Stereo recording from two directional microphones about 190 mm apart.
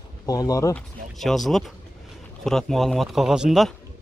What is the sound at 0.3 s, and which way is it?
Speech, 20° left (ahead or behind).